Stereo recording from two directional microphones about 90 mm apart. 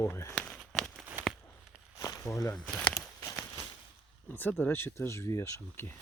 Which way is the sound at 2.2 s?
35° left (ahead or behind).